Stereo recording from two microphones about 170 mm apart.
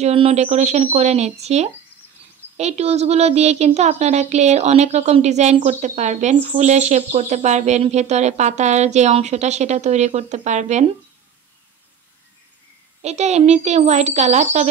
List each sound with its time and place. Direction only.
0.0 s speech: 35° right (ahead or behind)
13.0 s speech: 40° right (ahead or behind)